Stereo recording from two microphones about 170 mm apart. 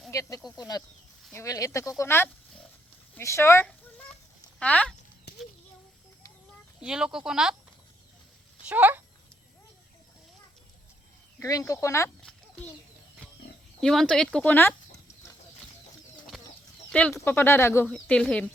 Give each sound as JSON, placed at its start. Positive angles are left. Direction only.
{"t": 0.1, "sound": "speech", "side_deg": 20}
{"t": 6.7, "sound": "speech", "side_deg": -5}
{"t": 8.6, "sound": "speech", "side_deg": -10}
{"t": 11.3, "sound": "speech", "side_deg": 15}
{"t": 13.8, "sound": "speech", "side_deg": 0}
{"t": 16.3, "sound": "chicken", "side_deg": 0}
{"t": 16.9, "sound": "speech", "side_deg": 5}
{"t": 17.8, "sound": "speech", "side_deg": 5}